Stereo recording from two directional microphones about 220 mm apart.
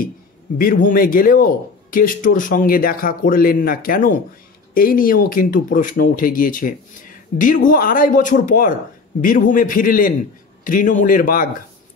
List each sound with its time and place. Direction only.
0.6 s speech: 40° left (ahead or behind)